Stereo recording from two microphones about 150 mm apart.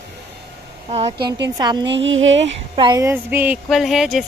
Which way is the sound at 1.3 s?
25° right (ahead or behind).